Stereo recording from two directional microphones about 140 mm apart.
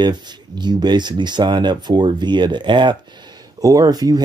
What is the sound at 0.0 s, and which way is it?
Speech, 30° right (ahead or behind).